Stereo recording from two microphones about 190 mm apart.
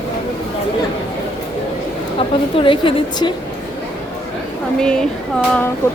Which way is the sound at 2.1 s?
25° left (ahead or behind).